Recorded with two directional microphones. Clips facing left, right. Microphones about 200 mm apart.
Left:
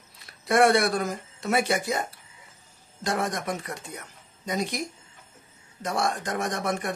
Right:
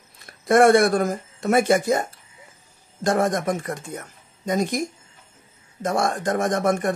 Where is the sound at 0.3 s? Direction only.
50° right (ahead or behind).